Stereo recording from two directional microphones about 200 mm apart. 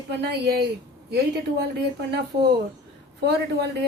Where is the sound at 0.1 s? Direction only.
55° right (ahead or behind).